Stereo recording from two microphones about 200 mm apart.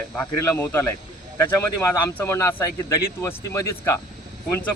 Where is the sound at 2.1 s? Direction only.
10° left (ahead or behind).